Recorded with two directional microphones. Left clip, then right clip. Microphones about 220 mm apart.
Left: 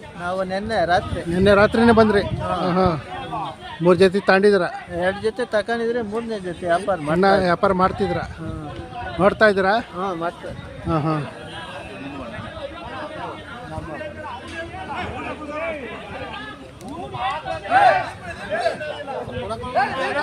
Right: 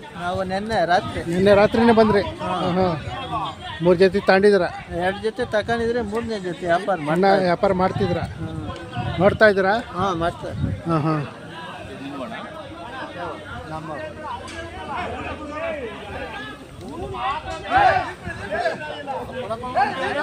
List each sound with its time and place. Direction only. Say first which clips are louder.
0.3 s a man's voice: left 1 dB; centre (ahead or behind)
3.2 s chatter: right 1 dB; 55° right (ahead or behind)
3.8 s a man's voice: left 1 dB; 10° left (ahead or behind)
10.0 s speech: right 3 dB; 55° right (ahead or behind)
10.8 s speech: even; centre (ahead or behind)
14.9 s chatter: right 1 dB; 40° left (ahead or behind)
17.2 s a sound: left 1 dB; 55° left (ahead or behind)
18.5 s chatter: left 1 dB; 55° left (ahead or behind)
19.5 s a sound: even; 55° left (ahead or behind)